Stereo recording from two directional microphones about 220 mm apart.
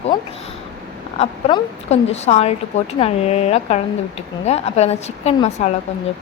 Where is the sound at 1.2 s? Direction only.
25° left (ahead or behind).